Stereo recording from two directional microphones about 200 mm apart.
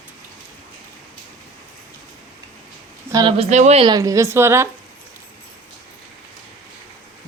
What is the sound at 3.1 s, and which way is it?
Speech, 25° right (ahead or behind).